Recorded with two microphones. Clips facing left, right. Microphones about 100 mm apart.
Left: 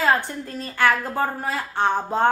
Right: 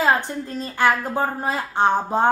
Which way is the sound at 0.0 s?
20° right (ahead or behind).